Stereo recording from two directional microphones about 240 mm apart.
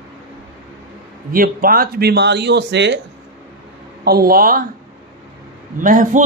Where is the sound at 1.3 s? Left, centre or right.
Right.